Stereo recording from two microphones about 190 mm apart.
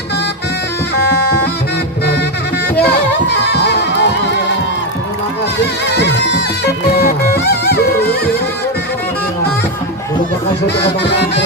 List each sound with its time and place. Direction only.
0.9 s music: 55° left (ahead or behind)
3.5 s music: 60° left (ahead or behind)
6.0 s music: 65° left (ahead or behind)
11.0 s music: 65° left (ahead or behind)